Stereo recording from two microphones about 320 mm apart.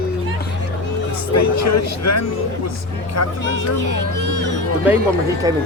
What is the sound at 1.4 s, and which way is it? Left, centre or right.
Speech, left.